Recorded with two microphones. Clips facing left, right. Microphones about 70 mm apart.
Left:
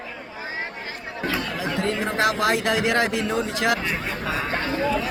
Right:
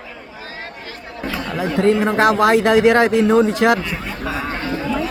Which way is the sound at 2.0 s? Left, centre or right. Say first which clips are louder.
Right 7 dB; right.